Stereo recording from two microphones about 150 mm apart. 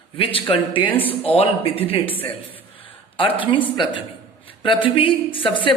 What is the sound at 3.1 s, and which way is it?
Speech, 35° left (ahead or behind).